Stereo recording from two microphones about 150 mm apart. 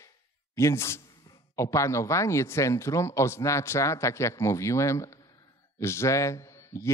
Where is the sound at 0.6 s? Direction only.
20° left (ahead or behind).